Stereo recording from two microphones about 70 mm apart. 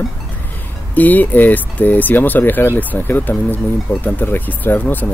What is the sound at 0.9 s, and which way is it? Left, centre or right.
Speech, left.